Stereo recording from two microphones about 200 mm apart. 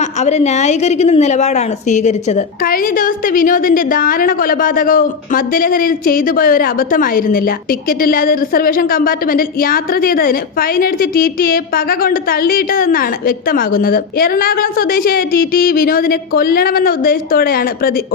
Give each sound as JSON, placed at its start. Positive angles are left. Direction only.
{"t": 0.0, "sound": "a woman's voice", "side_deg": 35}